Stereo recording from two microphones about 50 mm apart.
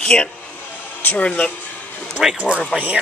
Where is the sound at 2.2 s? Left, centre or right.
Centre.